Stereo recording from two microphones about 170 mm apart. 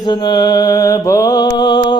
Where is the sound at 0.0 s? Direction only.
25° left (ahead or behind).